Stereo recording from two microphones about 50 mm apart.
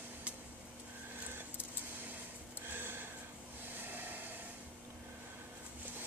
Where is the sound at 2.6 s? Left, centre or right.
Right.